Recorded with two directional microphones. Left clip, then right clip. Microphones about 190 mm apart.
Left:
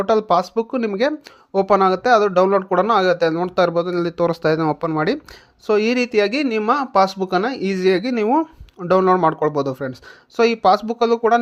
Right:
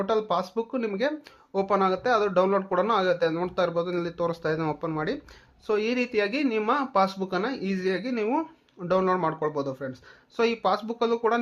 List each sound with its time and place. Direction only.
0.0 s speech: 35° left (ahead or behind)